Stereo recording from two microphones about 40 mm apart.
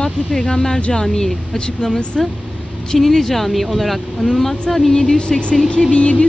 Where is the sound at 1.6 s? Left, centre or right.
Left.